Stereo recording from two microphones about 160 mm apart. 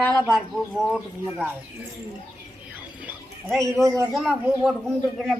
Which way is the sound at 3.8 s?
20° right (ahead or behind).